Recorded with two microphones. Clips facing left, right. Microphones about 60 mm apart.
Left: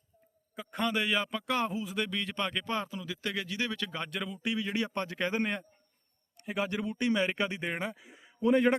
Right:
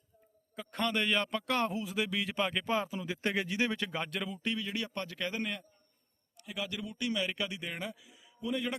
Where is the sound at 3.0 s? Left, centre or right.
Right.